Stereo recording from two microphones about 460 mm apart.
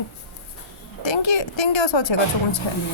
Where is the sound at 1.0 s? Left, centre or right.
Left.